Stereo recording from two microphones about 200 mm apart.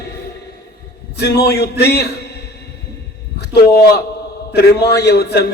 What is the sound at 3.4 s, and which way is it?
A man's voice, 55° left (ahead or behind).